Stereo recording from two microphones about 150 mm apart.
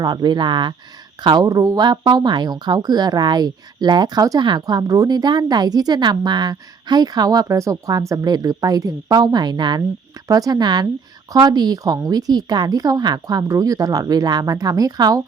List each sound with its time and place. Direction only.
0.0 s speech: 25° right (ahead or behind)